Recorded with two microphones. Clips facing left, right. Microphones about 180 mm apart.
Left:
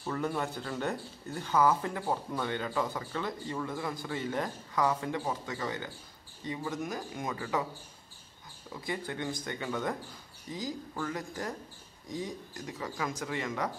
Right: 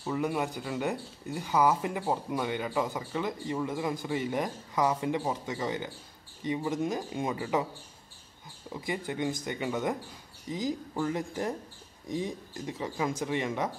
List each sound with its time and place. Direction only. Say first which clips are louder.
0.0 s speech: right 3 dB; 10° right (ahead or behind)
8.8 s speech: right 4 dB; 15° right (ahead or behind)